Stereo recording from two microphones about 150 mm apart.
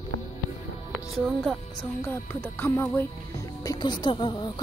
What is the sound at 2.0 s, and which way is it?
Speech, 15° left (ahead or behind).